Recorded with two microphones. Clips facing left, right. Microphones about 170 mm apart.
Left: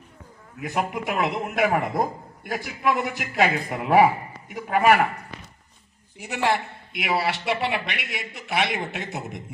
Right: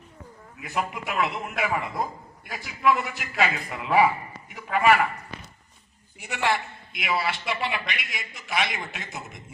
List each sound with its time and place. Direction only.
0.6 s a man's voice: 40° left (ahead or behind)
6.1 s a man's voice: 35° left (ahead or behind)
6.9 s a man's voice: 65° left (ahead or behind)